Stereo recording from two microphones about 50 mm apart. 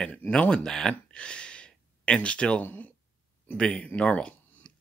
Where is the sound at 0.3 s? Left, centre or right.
Left.